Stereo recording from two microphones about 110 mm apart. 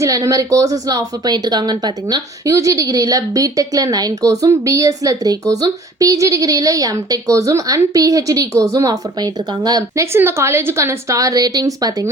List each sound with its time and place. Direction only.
0.0 s a woman's voice: 30° right (ahead or behind)